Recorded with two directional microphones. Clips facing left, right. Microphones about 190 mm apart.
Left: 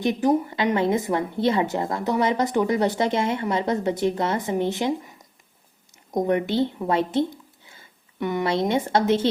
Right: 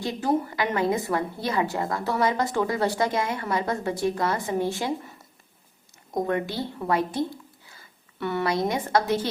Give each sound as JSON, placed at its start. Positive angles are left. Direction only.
{"t": 0.0, "sound": "a woman's voice", "side_deg": 20}